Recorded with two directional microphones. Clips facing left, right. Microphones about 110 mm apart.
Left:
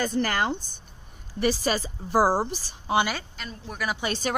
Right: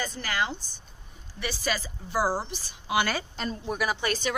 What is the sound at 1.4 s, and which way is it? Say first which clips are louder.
A woman's voice: left 6 dB; 35° left (ahead or behind).